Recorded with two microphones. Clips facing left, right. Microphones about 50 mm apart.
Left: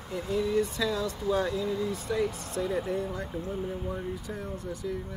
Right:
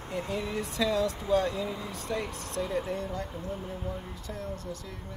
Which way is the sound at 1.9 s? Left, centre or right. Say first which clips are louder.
Left 4 dB; centre.